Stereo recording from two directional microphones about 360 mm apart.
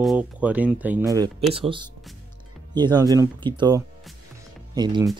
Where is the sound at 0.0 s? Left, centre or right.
Centre.